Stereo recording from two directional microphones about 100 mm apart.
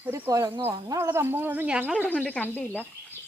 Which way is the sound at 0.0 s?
30° right (ahead or behind).